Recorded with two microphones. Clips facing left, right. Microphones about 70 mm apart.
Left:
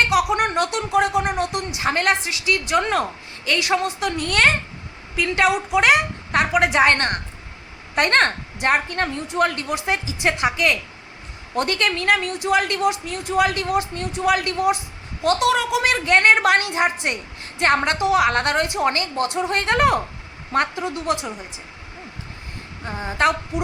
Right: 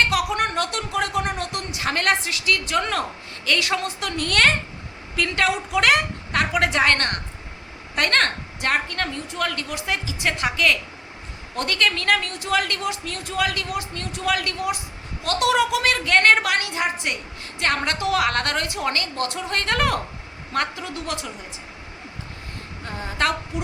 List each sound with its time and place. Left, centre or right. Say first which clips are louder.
0.1 s a woman's voice: left 4 dB; centre
15.4 s a woman's voice: right 4 dB; centre
15.7 s speech: left 2 dB; centre
16.4 s a woman's voice: left 5 dB; left
18.0 s a woman's voice: left 2 dB; centre
22.9 s a woman's voice: left 4 dB; left